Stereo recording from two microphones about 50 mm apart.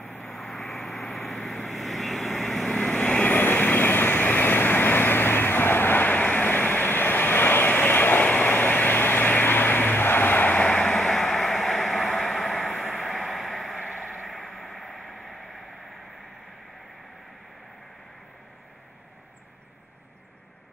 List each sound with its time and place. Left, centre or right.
0.2 s vehicle: centre
2.7 s vehicle: left
3.3 s vehicle: left
6.1 s waves: left
10.9 s vehicle: centre
14.2 s a sound: centre